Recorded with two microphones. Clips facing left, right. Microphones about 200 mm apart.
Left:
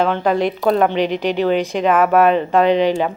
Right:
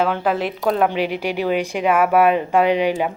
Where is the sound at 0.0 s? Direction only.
5° right (ahead or behind).